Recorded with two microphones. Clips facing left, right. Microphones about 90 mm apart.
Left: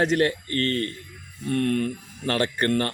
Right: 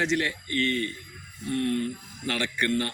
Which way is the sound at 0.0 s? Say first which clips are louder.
Left 5 dB; 45° left (ahead or behind).